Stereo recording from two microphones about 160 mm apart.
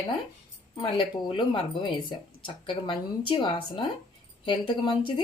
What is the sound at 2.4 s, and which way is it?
A woman's voice, 30° left (ahead or behind).